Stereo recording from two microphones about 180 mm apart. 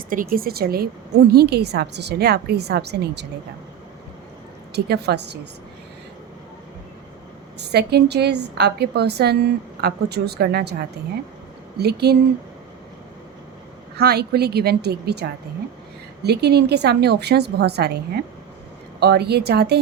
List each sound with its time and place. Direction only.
0.1 s a woman's voice: 50° right (ahead or behind); by 3.2 s 65° right (ahead or behind)
4.7 s a woman's voice: 65° right (ahead or behind)
7.6 s a woman's voice: 65° right (ahead or behind)
14.0 s a woman's voice: 60° right (ahead or behind)